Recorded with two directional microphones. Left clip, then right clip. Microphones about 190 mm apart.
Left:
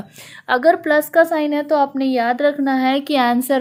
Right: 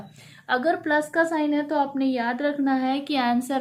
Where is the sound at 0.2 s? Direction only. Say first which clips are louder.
Left 7 dB; 55° left (ahead or behind).